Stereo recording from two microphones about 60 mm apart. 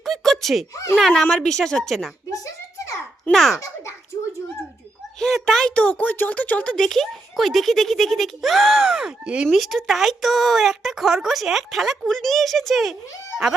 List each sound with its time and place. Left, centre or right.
0.0 s a sound: centre
0.7 s speech: left
0.9 s a woman's voice: centre
2.3 s a sound: left
3.3 s speech: centre
5.2 s speech: centre
5.6 s speech: centre
6.1 s speech: left
6.7 s speech: centre
9.5 s speech: centre